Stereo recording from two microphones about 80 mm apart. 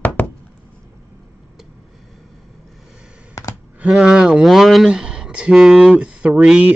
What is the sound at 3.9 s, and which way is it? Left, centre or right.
Speech, centre.